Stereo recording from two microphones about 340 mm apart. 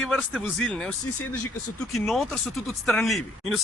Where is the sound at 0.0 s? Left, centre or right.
Centre.